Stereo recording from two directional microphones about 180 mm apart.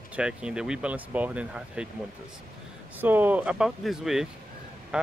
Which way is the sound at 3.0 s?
10° right (ahead or behind).